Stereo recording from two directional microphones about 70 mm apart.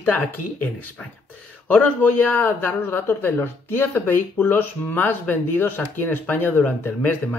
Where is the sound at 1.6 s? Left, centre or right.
Left.